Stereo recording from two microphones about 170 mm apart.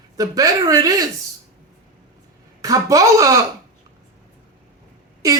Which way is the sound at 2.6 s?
20° right (ahead or behind).